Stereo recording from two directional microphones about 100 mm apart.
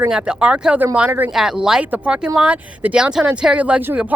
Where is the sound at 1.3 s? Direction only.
5° right (ahead or behind).